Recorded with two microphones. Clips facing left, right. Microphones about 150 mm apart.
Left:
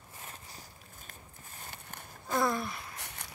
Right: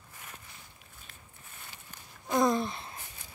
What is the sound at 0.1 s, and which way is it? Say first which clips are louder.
Walk: left 2 dB; 30° left (ahead or behind).